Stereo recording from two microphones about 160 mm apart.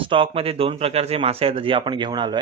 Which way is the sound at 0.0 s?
35° right (ahead or behind).